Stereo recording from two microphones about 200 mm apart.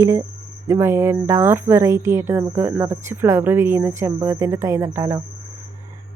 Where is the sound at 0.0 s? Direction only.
15° right (ahead or behind).